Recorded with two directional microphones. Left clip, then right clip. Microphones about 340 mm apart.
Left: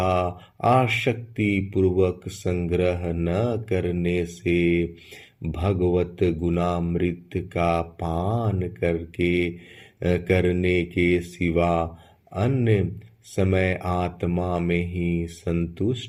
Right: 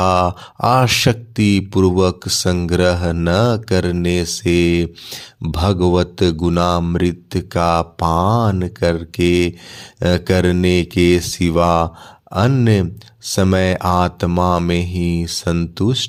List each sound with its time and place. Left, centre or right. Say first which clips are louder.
0.0 s speech: right 8 dB; right
10.0 s speech: right 6 dB; right